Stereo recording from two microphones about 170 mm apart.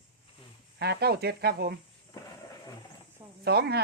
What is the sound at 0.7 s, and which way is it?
Speech, 75° right (ahead or behind).